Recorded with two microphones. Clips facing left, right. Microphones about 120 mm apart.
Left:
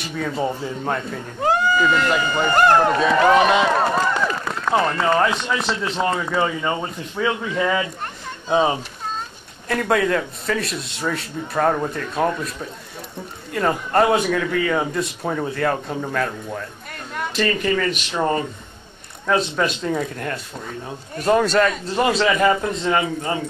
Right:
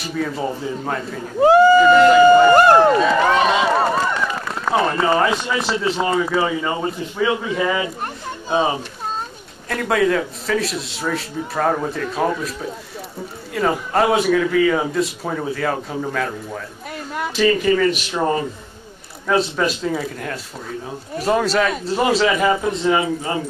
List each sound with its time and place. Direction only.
0.0 s a man's voice: centre (ahead or behind)
1.5 s speech: 30° right (ahead or behind)
3.0 s a man's voice: centre (ahead or behind)
7.8 s a sound: 10° right (ahead or behind)
9.7 s a man's voice: centre (ahead or behind)